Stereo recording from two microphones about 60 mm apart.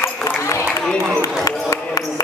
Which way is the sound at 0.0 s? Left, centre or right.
Left.